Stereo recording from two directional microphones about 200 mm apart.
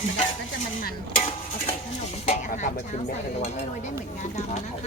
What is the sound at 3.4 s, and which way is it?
Speech, 35° left (ahead or behind).